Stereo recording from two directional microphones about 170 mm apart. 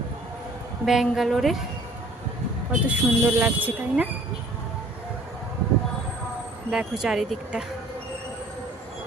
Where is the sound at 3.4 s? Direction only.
10° right (ahead or behind).